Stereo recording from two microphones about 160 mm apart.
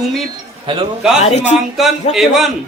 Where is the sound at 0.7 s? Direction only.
30° right (ahead or behind).